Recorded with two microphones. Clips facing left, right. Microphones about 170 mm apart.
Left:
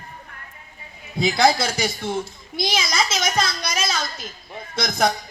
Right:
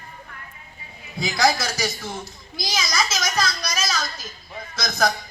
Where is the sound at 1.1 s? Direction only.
25° left (ahead or behind).